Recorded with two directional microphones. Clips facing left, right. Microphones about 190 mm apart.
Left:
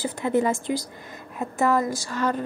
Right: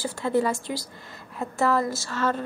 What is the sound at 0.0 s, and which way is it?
A woman's voice, 20° left (ahead or behind).